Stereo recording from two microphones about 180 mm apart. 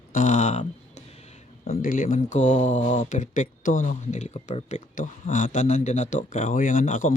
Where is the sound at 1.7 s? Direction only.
50° left (ahead or behind).